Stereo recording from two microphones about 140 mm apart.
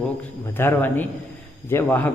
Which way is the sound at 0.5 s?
15° left (ahead or behind).